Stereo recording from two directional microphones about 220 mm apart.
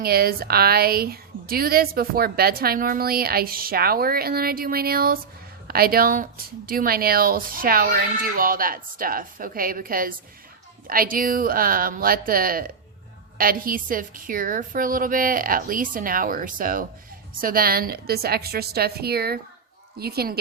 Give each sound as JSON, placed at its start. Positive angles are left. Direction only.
{"t": 0.0, "sound": "a woman's voice", "side_deg": -45}